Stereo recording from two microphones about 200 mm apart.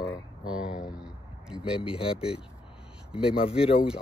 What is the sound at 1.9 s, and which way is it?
Speech, 25° left (ahead or behind).